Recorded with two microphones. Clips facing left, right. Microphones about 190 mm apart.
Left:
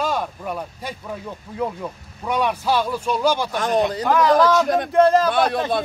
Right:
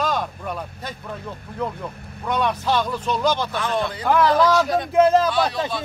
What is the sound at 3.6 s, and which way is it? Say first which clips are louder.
Speech: left 4 dB; 40° left (ahead or behind).